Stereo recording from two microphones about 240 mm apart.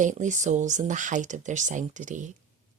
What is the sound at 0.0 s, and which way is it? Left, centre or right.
Speech, right.